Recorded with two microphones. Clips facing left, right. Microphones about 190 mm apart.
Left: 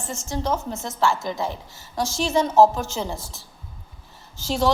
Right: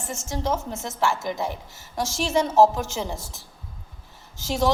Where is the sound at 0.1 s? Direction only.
20° right (ahead or behind).